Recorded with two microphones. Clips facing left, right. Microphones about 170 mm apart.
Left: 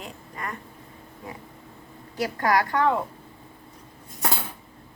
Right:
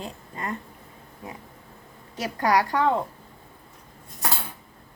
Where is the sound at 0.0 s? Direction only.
25° right (ahead or behind).